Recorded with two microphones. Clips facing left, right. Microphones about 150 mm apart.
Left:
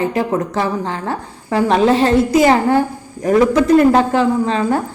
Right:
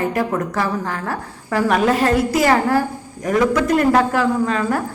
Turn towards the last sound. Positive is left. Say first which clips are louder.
# left 3 dB
turn(degrees=25)  # may be behind; listen again after turning